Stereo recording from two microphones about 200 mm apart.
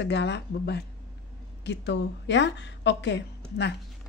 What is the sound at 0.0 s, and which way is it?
A woman's voice, 60° left (ahead or behind).